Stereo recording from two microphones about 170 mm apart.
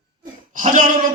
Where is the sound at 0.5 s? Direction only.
45° right (ahead or behind).